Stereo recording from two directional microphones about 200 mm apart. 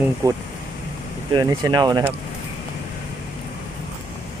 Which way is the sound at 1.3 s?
20° right (ahead or behind).